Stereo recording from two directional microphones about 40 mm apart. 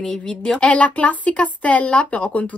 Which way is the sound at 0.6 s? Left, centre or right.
Left.